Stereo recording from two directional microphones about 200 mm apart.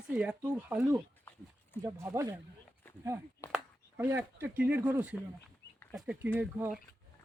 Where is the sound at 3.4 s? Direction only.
15° left (ahead or behind).